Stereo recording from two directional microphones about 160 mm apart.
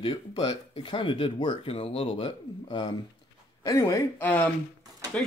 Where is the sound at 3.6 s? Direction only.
20° left (ahead or behind).